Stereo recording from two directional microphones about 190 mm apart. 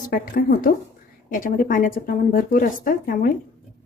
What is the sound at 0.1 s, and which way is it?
Speech, 50° left (ahead or behind).